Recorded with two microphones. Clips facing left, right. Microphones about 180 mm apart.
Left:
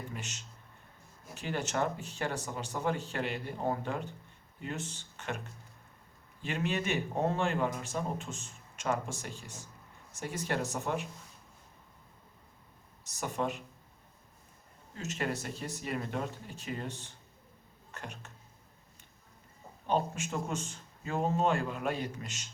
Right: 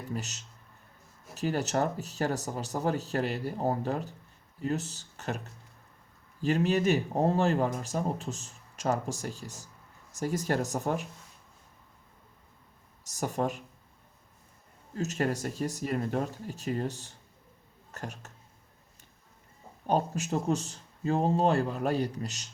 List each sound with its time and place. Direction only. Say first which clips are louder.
0.1 s speech: right 7 dB; 40° right (ahead or behind)
13.1 s speech: right 4 dB; 40° right (ahead or behind)
14.9 s speech: right 5 dB; 40° right (ahead or behind)
19.9 s speech: right 4 dB; 40° right (ahead or behind)